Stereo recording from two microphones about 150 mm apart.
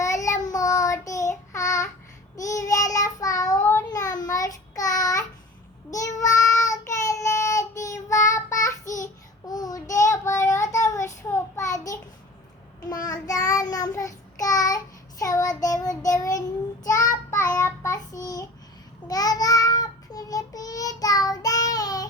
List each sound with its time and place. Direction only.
0.0 s child singing: 20° left (ahead or behind)
13.1 s child singing: 25° left (ahead or behind)
17.5 s child singing: 25° left (ahead or behind)